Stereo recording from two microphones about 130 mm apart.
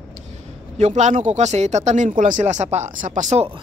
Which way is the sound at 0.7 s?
65° right (ahead or behind).